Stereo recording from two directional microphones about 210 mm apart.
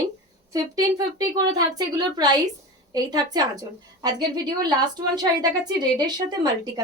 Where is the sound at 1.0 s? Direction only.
20° right (ahead or behind).